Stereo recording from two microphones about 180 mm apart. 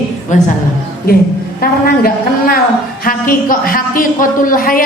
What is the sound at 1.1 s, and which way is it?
A woman's voice, 55° left (ahead or behind).